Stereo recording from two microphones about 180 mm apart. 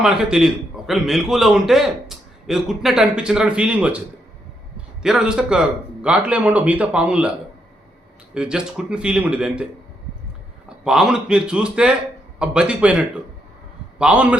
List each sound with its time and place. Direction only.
0.0 s a man's voice: 5° right (ahead or behind)
5.0 s a man's voice: 5° right (ahead or behind)
10.8 s a man's voice: 5° right (ahead or behind)